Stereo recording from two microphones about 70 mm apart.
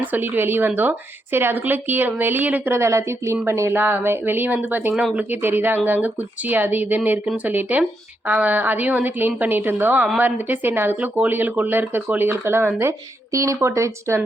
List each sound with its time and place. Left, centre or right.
0.0 s speech: right
2.7 s speech: right
3.7 s speech: right
13.3 s speech: right